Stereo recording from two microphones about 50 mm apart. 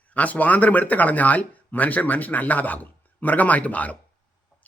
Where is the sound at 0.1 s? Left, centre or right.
Left.